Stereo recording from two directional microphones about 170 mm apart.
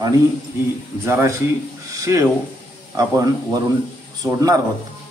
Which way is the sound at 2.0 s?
20° right (ahead or behind).